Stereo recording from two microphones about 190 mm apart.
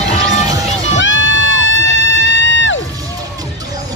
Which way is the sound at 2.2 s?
75° left (ahead or behind).